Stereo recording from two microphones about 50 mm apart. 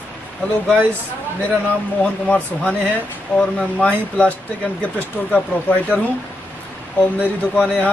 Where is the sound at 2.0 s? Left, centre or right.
Left.